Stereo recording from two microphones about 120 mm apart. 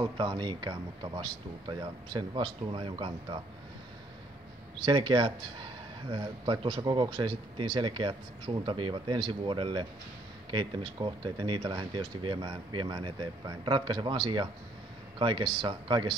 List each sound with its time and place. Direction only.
0.0 s speech: 40° right (ahead or behind)
4.7 s speech: 40° right (ahead or behind)